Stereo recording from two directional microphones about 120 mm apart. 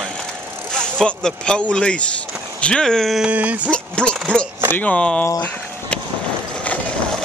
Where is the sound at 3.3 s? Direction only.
10° right (ahead or behind).